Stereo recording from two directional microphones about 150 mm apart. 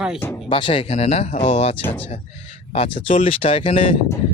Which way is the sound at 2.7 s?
45° left (ahead or behind).